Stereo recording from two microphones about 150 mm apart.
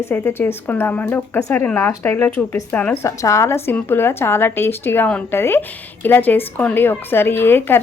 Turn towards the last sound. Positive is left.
turn(degrees=15)  # may be behind; listen again after turning